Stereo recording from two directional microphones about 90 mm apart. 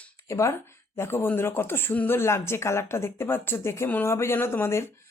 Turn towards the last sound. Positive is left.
turn(degrees=30)  # may be behind; listen again after turning